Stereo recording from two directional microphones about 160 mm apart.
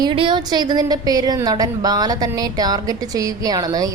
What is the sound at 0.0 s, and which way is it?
A woman's voice, 30° right (ahead or behind).